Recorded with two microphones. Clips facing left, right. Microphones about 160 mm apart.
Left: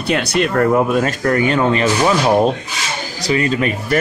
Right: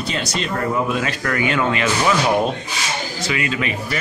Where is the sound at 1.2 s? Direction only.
35° left (ahead or behind).